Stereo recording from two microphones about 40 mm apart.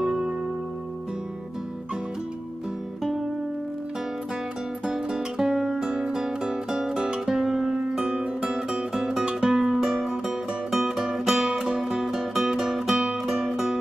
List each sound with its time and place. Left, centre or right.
0.0 s music: centre
3.0 s music: centre
4.9 s music: centre
5.9 s music: centre